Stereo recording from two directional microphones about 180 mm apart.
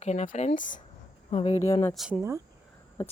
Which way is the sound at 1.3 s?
35° left (ahead or behind).